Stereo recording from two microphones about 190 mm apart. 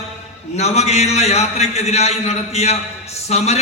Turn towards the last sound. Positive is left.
turn(degrees=35)  # may be behind; listen again after turning